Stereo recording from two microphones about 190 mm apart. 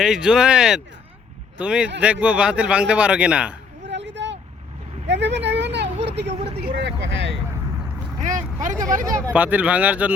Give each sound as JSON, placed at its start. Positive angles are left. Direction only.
{"t": 0.0, "sound": "a man's voice", "side_deg": -5}
{"t": 3.8, "sound": "vehicle", "side_deg": -70}
{"t": 6.2, "sound": "speech", "side_deg": -35}
{"t": 6.8, "sound": "speech", "side_deg": -65}
{"t": 8.2, "sound": "speech", "side_deg": -40}
{"t": 9.0, "sound": "a man's voice", "side_deg": -15}